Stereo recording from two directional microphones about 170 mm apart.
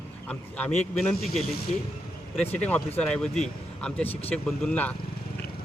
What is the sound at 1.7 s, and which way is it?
Speech, 40° left (ahead or behind).